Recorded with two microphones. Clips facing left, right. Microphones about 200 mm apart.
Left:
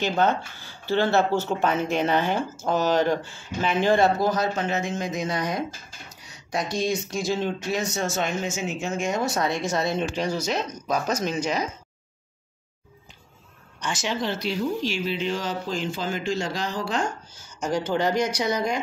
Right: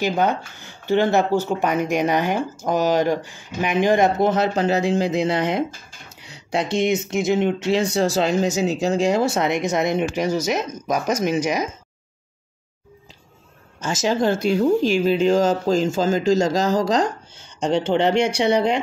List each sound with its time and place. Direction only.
0.0 s speech: 15° right (ahead or behind)
13.7 s speech: 40° right (ahead or behind)
17.9 s speech: 25° right (ahead or behind)